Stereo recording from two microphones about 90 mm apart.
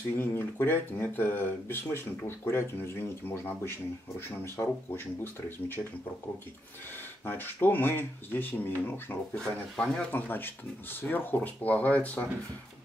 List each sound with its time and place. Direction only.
0.2 s speech: 25° left (ahead or behind)
7.2 s speech: 20° left (ahead or behind)
9.3 s speech: 10° left (ahead or behind)